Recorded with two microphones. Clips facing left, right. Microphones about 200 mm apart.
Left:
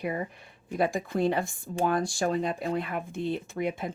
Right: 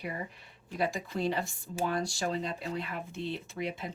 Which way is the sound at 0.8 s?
50° left (ahead or behind).